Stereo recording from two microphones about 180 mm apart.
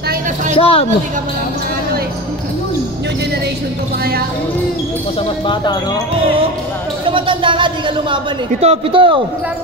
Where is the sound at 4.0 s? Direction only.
60° right (ahead or behind).